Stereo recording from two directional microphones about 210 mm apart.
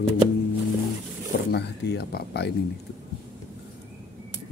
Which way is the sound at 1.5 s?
50° left (ahead or behind).